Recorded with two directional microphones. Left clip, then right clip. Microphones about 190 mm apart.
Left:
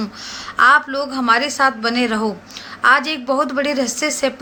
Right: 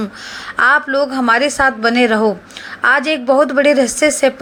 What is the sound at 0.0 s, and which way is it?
A woman's voice, 25° right (ahead or behind).